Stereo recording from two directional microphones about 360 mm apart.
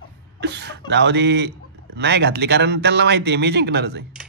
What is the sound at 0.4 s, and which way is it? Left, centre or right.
Speech, right.